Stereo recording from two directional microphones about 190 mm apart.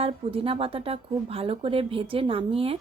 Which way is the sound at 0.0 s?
30° right (ahead or behind).